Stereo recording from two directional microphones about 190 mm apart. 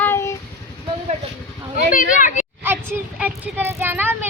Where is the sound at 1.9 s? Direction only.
40° left (ahead or behind).